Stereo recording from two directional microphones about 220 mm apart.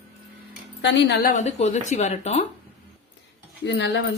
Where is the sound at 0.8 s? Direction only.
50° left (ahead or behind); by 2.4 s 30° left (ahead or behind).